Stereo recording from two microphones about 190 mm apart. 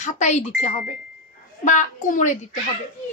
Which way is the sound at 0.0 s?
40° left (ahead or behind).